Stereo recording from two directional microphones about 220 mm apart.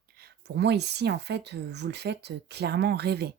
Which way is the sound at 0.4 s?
50° right (ahead or behind).